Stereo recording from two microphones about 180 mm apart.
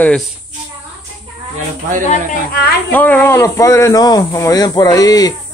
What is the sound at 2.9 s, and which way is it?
Speech, 10° left (ahead or behind).